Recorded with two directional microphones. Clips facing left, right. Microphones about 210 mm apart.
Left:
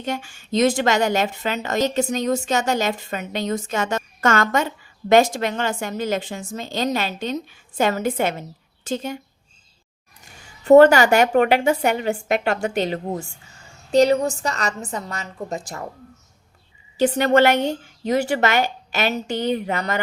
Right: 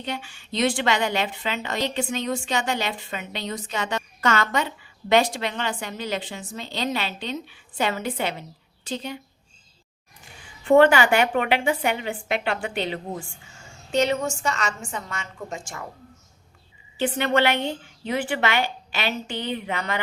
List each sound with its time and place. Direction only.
0.0 s a woman's voice: 45° left (ahead or behind)
10.4 s a woman's voice: 40° left (ahead or behind)
17.0 s a woman's voice: 40° left (ahead or behind)